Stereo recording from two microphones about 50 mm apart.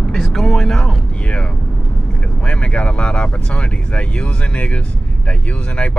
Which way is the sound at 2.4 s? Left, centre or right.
Left.